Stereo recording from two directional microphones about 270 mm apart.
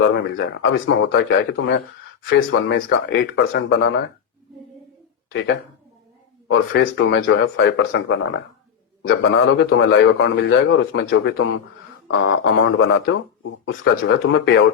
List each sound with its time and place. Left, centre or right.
0.0 s a man's voice: left
5.3 s a man's voice: left
9.0 s a man's voice: left